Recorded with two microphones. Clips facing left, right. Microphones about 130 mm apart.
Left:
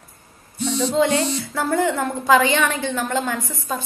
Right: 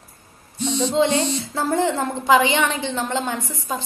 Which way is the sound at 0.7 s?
20° right (ahead or behind).